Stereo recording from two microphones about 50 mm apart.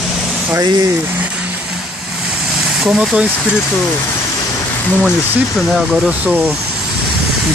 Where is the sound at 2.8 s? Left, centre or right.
Centre.